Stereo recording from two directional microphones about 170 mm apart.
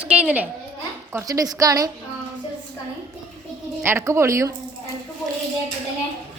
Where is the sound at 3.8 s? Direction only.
15° right (ahead or behind).